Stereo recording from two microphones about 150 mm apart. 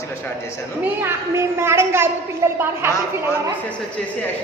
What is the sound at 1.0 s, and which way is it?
A woman's voice, 15° right (ahead or behind).